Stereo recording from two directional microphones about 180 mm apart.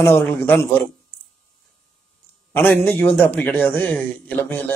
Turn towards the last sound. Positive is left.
turn(degrees=10)  # may be behind; listen again after turning